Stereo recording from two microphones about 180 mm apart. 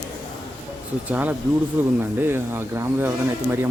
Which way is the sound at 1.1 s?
10° right (ahead or behind).